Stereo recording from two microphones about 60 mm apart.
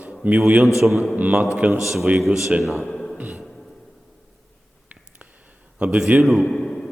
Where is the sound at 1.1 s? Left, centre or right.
Right.